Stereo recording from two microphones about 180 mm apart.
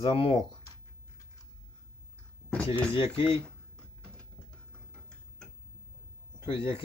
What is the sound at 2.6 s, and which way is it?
Speech, 30° left (ahead or behind).